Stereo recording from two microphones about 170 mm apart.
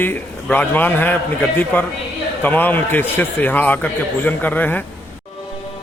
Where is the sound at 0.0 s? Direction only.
10° left (ahead or behind).